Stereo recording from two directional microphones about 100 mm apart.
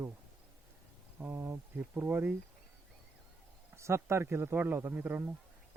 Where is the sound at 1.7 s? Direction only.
20° right (ahead or behind).